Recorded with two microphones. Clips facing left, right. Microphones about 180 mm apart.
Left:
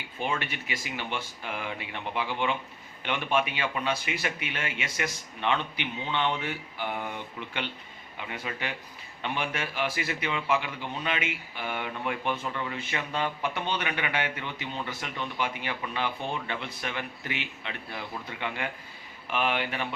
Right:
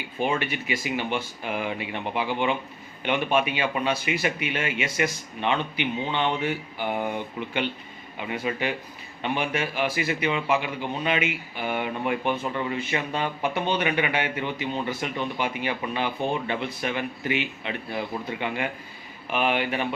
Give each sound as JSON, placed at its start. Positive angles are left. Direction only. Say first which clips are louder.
{"t": 0.2, "sound": "speech", "louder": "right 6 dB", "side_deg": -10}